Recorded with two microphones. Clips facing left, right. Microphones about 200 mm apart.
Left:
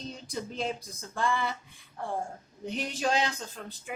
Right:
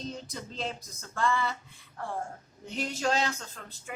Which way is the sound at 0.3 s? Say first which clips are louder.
Left 4 dB; 15° left (ahead or behind).